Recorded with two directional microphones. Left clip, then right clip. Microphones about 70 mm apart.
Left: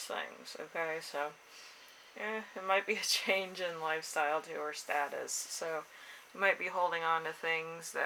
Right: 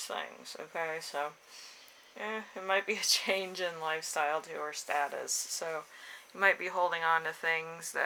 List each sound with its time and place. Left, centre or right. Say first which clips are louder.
0.1 s speech: left 1 dB; right